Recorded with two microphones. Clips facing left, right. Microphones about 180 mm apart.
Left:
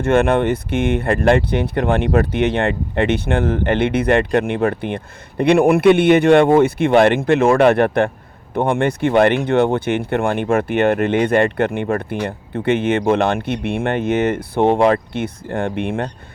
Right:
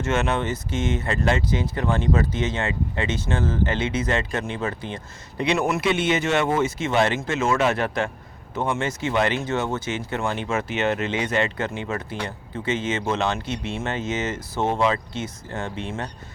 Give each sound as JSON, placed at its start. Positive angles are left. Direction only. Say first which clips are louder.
{"t": 0.0, "sound": "speech", "louder": "left 9 dB", "side_deg": 55}